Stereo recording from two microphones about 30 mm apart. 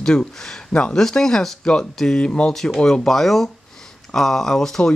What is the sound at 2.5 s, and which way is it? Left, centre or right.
Speech, centre.